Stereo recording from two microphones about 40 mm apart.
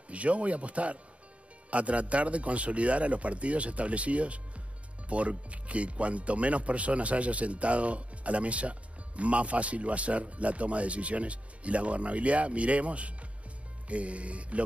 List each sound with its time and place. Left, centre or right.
0.1 s speech: right